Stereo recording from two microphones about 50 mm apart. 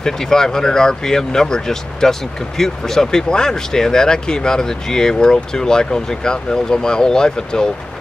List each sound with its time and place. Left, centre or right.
0.0 s speech: centre